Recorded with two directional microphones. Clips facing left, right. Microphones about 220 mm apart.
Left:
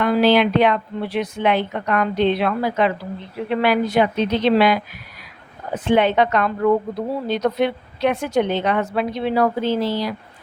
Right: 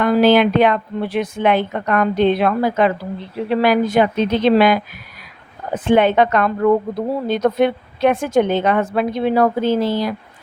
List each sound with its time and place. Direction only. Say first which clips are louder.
0.0 s a woman's voice: right 3 dB; 50° right (ahead or behind)